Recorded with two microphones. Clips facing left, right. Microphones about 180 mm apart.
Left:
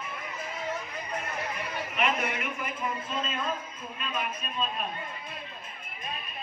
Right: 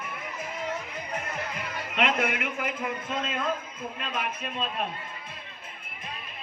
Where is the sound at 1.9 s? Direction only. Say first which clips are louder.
Right 3 dB; 90° right; by 3.5 s 75° right (ahead or behind).